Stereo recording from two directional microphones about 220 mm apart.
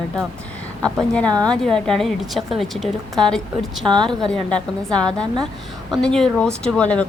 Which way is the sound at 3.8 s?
20° right (ahead or behind).